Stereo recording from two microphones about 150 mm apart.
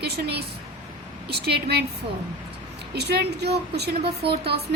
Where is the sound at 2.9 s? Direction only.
90° right.